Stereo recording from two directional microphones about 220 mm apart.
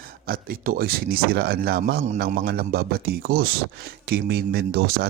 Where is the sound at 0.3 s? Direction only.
40° right (ahead or behind).